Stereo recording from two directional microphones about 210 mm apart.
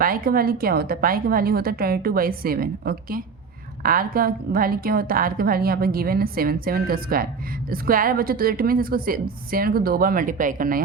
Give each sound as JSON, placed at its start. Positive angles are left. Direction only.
{"t": 0.0, "sound": "a woman's voice", "side_deg": -45}